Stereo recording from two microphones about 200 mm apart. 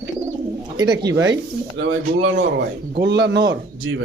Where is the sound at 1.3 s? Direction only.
65° right (ahead or behind).